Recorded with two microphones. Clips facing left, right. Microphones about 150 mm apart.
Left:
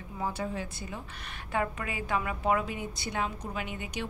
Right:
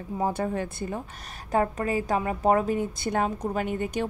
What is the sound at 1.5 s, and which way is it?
A woman's voice, 40° right (ahead or behind).